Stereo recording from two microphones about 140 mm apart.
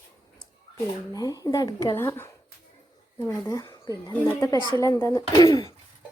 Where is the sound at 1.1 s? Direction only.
25° left (ahead or behind).